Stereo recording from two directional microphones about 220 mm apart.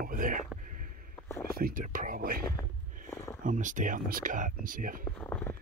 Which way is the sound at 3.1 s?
10° left (ahead or behind).